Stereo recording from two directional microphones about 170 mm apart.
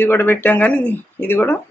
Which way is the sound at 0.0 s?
10° left (ahead or behind).